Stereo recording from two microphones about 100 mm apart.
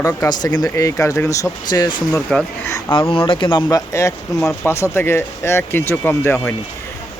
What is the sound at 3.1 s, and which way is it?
Speech, 65° left (ahead or behind).